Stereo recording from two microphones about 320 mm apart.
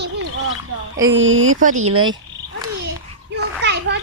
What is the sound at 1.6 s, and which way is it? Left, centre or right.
Speech, right.